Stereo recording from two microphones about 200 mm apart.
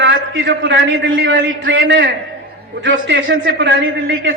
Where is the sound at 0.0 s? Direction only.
65° right (ahead or behind).